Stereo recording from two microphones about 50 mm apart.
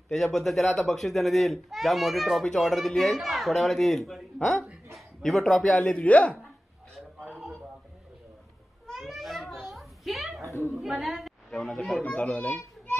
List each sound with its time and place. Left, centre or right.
0.1 s a child's voice: centre
5.8 s speech: left
8.9 s children playing: centre
10.8 s a sound: centre
11.5 s speech: centre